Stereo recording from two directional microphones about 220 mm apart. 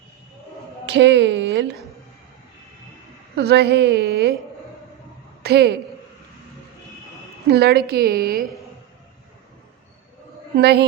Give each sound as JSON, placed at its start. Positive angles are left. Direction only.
{"t": 0.9, "sound": "a woman's voice", "side_deg": -55}
{"t": 3.3, "sound": "a woman's voice", "side_deg": -50}
{"t": 5.4, "sound": "a woman's voice", "side_deg": -45}
{"t": 7.5, "sound": "a woman's voice", "side_deg": -45}
{"t": 10.6, "sound": "a woman's voice", "side_deg": -50}